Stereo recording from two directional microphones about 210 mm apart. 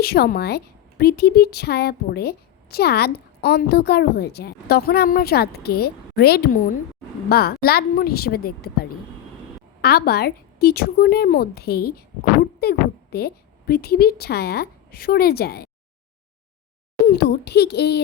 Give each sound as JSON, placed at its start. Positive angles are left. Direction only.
{"t": 0.0, "sound": "a woman's voice", "side_deg": 50}
{"t": 17.1, "sound": "speech", "side_deg": 50}